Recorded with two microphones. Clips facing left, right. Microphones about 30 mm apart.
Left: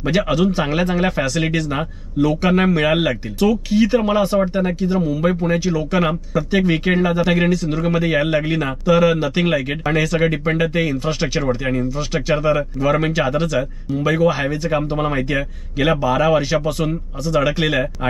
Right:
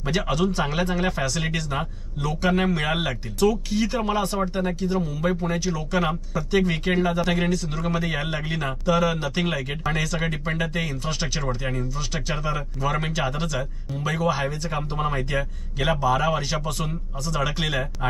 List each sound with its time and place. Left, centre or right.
0.0 s a man's voice: left
15.3 s a man's voice: centre